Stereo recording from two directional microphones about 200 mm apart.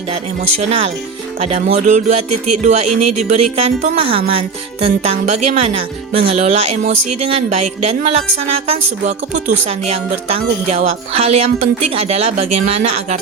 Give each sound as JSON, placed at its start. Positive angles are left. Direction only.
{"t": 0.1, "sound": "speech", "side_deg": -30}